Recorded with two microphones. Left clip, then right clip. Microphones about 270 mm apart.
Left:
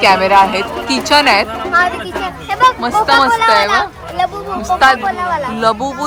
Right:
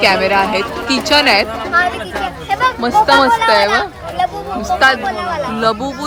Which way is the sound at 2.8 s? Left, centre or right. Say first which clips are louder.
Right 1 dB; centre.